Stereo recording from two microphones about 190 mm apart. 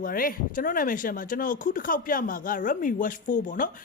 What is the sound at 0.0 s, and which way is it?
Speech, 50° left (ahead or behind).